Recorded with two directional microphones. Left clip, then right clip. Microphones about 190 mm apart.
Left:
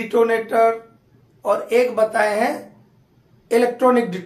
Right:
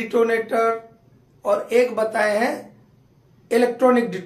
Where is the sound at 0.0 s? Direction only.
10° left (ahead or behind).